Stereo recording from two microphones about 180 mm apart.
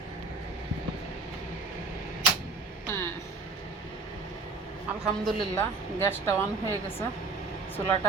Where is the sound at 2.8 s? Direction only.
15° left (ahead or behind).